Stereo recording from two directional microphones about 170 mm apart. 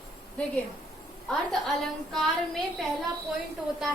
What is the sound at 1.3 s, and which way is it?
A woman's voice, centre (ahead or behind).